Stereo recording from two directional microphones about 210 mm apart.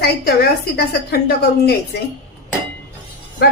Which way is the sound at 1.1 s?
50° left (ahead or behind).